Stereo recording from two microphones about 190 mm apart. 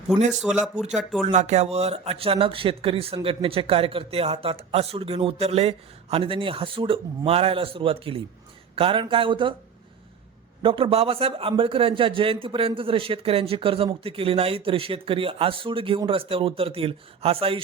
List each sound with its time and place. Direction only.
0.1 s speech: centre (ahead or behind)
1.3 s a man's voice: 35° right (ahead or behind)
10.6 s a man's voice: 25° right (ahead or behind)